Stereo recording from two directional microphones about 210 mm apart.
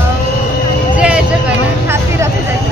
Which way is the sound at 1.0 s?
5° right (ahead or behind).